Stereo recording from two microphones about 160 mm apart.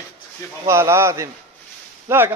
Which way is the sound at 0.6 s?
15° right (ahead or behind).